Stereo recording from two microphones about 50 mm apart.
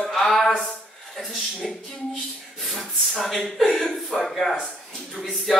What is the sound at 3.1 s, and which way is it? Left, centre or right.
Speech, centre.